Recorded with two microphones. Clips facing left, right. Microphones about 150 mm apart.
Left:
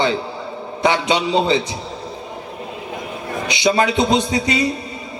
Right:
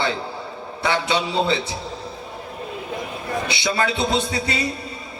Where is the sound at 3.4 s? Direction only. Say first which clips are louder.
Left 8 dB; 20° left (ahead or behind).